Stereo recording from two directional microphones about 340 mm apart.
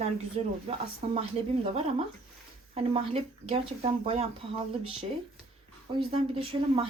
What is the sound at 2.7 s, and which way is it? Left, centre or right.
Speech, centre.